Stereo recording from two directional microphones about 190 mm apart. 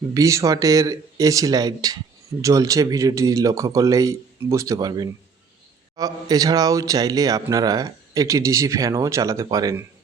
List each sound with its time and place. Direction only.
0.1 s a man's voice: 15° right (ahead or behind)